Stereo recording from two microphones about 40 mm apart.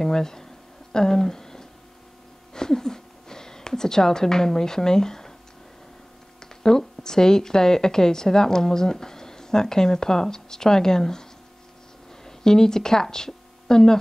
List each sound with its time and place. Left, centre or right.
0.0 s speech: centre
0.9 s a sound: centre
2.5 s speech: centre
6.4 s speech: centre
12.3 s a woman's voice: centre